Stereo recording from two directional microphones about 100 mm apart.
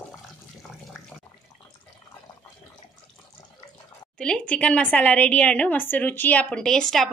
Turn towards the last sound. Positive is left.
turn(degrees=5)  # may be behind; listen again after turning